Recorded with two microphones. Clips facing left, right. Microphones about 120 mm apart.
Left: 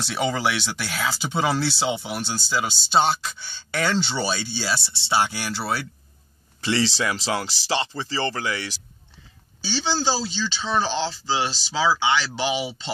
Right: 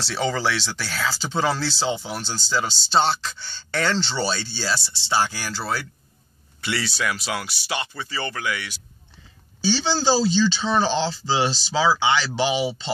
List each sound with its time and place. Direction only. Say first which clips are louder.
0.0 s speech: even; 15° left (ahead or behind); by 8.7 s 30° left (ahead or behind)
9.8 s speech: right 1 dB; centre (ahead or behind)